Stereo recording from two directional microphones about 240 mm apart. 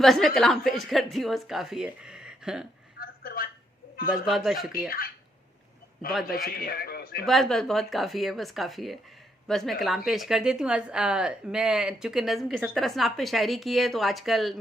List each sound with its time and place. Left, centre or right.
0.0 s a woman's voice: centre
3.0 s a sound: left
4.1 s a woman's voice: centre
4.9 s a man's voice: left
6.2 s a man's voice: left
7.3 s a woman's voice: centre